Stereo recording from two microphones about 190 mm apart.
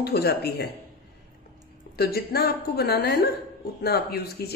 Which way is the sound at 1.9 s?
55° left (ahead or behind).